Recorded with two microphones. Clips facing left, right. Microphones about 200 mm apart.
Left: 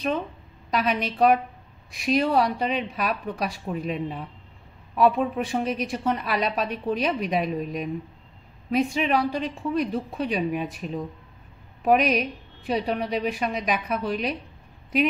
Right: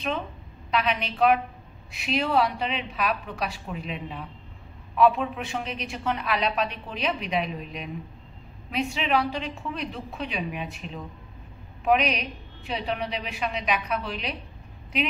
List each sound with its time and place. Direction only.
0.7 s a woman's voice: 45° left (ahead or behind)